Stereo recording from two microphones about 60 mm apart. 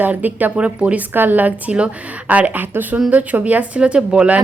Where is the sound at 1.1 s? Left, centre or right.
Right.